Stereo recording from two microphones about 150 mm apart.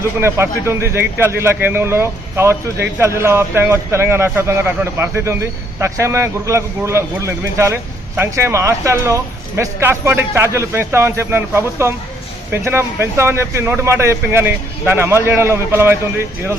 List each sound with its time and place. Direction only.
0.0 s speech: 15° right (ahead or behind)